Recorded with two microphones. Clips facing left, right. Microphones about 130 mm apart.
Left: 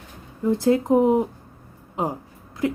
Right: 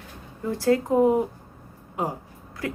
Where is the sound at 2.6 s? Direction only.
20° left (ahead or behind).